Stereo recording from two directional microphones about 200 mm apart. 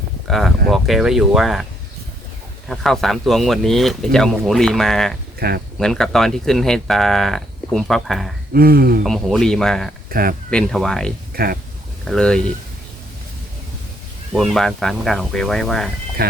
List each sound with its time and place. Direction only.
0.3 s speech: centre (ahead or behind)
2.6 s speech: centre (ahead or behind)
5.4 s speech: 50° right (ahead or behind)
5.8 s speech: centre (ahead or behind)
8.5 s speech: 50° right (ahead or behind)
9.0 s speech: centre (ahead or behind)
10.1 s speech: 45° right (ahead or behind)
10.5 s speech: centre (ahead or behind)
11.4 s speech: 50° right (ahead or behind)
12.0 s speech: 5° left (ahead or behind)
14.3 s speech: centre (ahead or behind)